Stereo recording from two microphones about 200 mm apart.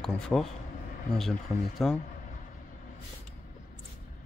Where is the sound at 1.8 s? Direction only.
Centre (ahead or behind).